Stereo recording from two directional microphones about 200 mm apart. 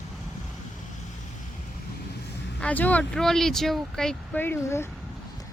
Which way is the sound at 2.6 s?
5° left (ahead or behind).